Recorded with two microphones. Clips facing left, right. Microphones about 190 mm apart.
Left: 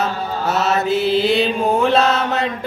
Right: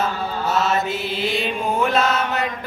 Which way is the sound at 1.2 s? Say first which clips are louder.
Left 7 dB; 30° left (ahead or behind).